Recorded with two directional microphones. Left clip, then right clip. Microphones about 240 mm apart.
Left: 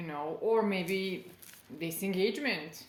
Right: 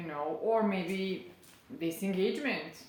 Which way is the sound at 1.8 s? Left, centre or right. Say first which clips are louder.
Even; left.